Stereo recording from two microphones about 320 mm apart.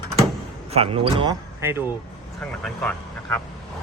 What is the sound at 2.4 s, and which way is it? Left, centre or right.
Speech, centre.